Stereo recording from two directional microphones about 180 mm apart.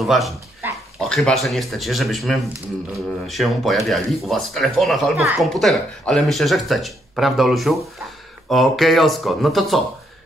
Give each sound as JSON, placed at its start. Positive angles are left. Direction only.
{"t": 0.0, "sound": "speech", "side_deg": 0}